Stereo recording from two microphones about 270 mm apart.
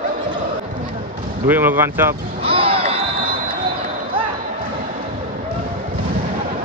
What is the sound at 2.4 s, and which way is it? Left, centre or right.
Crowd, right.